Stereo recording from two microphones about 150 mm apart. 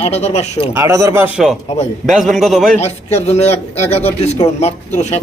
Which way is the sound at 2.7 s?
45° left (ahead or behind).